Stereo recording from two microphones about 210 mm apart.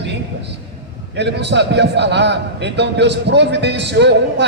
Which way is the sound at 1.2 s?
55° right (ahead or behind).